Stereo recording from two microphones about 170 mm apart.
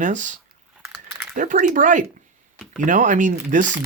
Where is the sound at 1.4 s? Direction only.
50° right (ahead or behind).